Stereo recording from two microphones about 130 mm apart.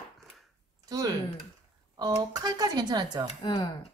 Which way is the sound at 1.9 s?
30° right (ahead or behind).